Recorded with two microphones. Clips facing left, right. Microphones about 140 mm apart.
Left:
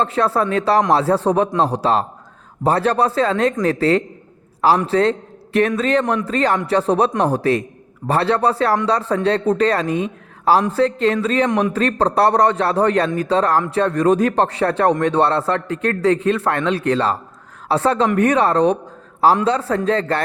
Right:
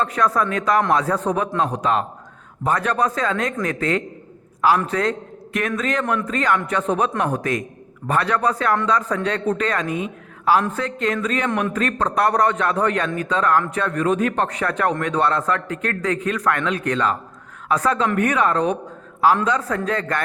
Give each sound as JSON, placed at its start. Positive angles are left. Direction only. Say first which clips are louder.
{"t": 0.0, "sound": "a man's voice", "louder": "left 2 dB", "side_deg": 30}